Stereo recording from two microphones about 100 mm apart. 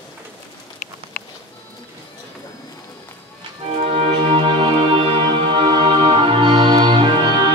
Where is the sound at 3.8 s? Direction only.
85° right.